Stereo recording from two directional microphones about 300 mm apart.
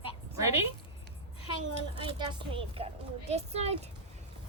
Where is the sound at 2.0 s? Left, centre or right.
Centre.